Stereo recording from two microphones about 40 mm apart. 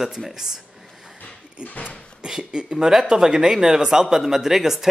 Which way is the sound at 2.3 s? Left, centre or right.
Centre.